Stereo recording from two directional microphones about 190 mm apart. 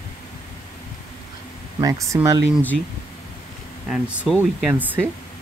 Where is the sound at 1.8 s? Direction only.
15° right (ahead or behind).